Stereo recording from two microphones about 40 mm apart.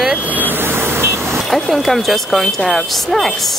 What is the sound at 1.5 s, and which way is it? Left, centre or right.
Speech, centre.